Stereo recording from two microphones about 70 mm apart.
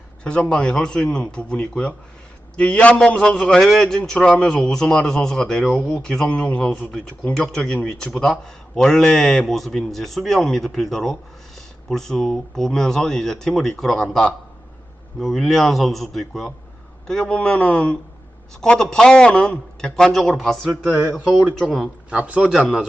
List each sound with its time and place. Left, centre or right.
0.3 s a man's voice: centre
22.1 s a man's voice: centre